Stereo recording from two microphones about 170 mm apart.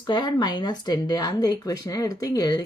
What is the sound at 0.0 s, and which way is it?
Speech, 25° left (ahead or behind).